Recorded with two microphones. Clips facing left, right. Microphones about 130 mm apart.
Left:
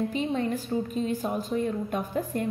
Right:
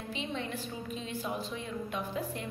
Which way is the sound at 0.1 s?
45° left (ahead or behind).